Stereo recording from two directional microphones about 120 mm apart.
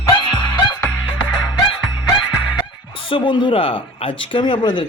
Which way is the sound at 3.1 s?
45° left (ahead or behind).